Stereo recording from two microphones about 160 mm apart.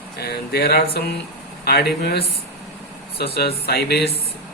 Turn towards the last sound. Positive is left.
turn(degrees=85)